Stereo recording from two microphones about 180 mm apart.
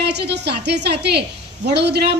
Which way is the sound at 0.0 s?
70° right (ahead or behind).